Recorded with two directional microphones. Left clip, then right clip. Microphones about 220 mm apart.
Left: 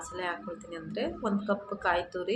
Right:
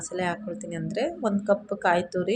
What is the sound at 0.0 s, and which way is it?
Speech, 25° right (ahead or behind).